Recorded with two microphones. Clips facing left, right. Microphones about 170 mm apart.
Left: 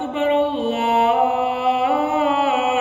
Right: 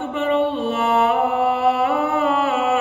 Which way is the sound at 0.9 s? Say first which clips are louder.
Left 1 dB; 20° left (ahead or behind).